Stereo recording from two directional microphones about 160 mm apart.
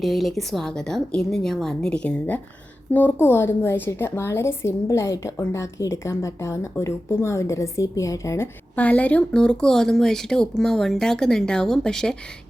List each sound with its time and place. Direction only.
0.0 s a woman's voice: centre (ahead or behind)